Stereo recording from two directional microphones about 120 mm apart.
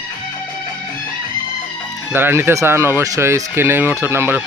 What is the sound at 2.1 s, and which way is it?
Speech, 20° right (ahead or behind).